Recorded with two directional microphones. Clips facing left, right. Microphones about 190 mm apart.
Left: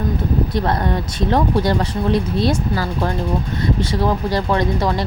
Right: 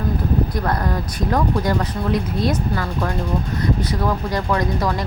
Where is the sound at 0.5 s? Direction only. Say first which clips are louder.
Left 3 dB; 25° left (ahead or behind).